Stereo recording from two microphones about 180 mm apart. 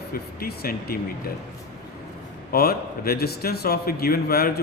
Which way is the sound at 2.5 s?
55° left (ahead or behind).